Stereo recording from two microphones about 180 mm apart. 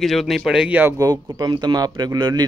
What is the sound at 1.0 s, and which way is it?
A man's voice, 20° right (ahead or behind).